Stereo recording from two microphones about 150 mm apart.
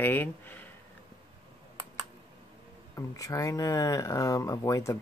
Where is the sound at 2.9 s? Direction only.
20° left (ahead or behind).